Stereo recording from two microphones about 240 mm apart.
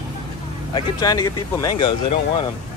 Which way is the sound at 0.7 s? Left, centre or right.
Centre.